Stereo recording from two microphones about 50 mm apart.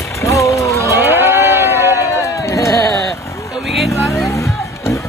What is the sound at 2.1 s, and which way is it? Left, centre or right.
Sheep, left.